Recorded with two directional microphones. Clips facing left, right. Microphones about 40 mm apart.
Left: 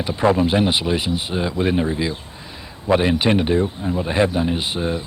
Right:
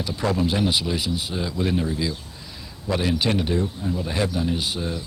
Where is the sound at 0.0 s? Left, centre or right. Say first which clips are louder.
Left 6 dB; left.